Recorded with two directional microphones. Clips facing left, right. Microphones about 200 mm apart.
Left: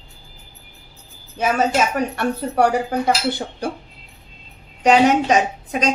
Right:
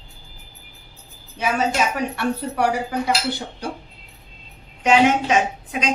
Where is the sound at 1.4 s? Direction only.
45° left (ahead or behind).